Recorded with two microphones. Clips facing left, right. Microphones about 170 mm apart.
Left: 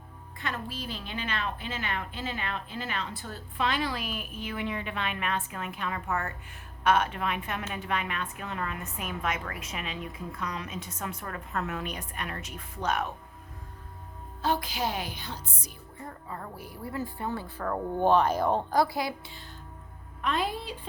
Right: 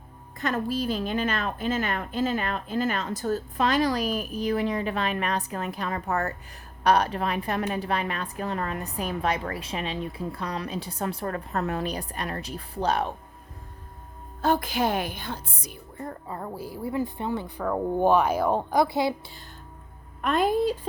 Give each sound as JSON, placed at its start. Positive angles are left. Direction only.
{"t": 0.3, "sound": "a woman's voice", "side_deg": -45}
{"t": 14.4, "sound": "speech", "side_deg": -50}
{"t": 16.3, "sound": "a woman's voice", "side_deg": -30}
{"t": 16.9, "sound": "speech", "side_deg": -20}
{"t": 20.2, "sound": "speech", "side_deg": -50}